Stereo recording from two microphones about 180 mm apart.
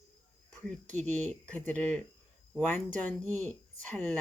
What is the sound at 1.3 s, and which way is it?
Speech, 10° left (ahead or behind).